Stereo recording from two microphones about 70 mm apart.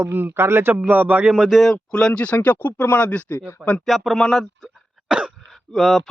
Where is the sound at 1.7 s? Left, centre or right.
Centre; by 3.5 s left.